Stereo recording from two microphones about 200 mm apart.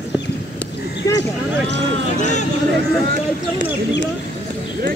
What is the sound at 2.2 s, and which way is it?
Speech, 35° left (ahead or behind).